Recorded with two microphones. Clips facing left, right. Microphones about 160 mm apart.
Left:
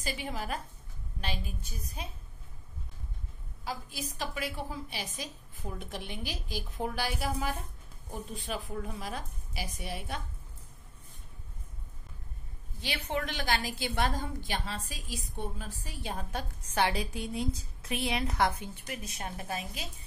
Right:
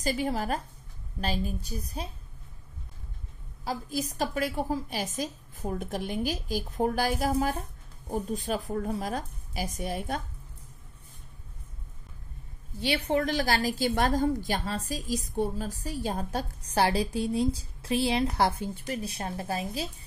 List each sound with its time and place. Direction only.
0.0 s a woman's voice: 40° right (ahead or behind)
3.6 s a woman's voice: 40° right (ahead or behind)
12.8 s a woman's voice: 35° right (ahead or behind)